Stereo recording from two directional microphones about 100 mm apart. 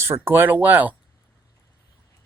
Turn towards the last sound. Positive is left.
turn(degrees=-15)  # may be behind; listen again after turning